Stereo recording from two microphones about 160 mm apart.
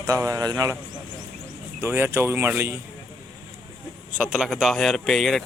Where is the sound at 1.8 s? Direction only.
15° right (ahead or behind).